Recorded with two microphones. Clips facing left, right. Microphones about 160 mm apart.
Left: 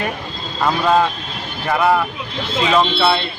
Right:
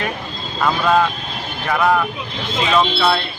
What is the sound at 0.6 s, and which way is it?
Speech, 15° left (ahead or behind).